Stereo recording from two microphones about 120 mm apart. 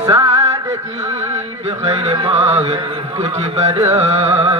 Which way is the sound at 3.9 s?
55° right (ahead or behind).